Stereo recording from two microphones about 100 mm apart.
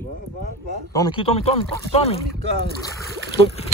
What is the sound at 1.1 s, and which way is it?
Speech, 65° left (ahead or behind).